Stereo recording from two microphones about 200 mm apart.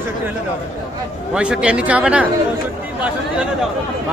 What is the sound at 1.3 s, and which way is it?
Speech, 5° right (ahead or behind).